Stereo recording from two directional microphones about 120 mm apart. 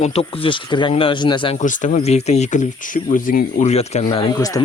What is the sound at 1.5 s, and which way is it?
Speech, 90° left.